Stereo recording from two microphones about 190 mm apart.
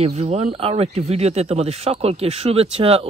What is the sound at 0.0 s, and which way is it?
Speech, 35° right (ahead or behind).